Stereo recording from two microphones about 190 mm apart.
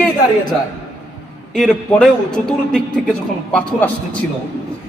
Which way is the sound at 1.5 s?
Centre (ahead or behind).